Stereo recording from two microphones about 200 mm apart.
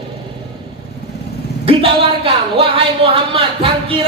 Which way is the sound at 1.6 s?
25° right (ahead or behind).